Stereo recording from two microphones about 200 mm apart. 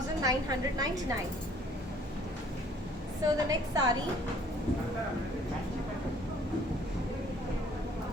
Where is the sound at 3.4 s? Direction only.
20° right (ahead or behind).